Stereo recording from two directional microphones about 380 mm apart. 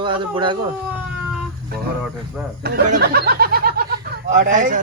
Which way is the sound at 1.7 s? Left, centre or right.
Right.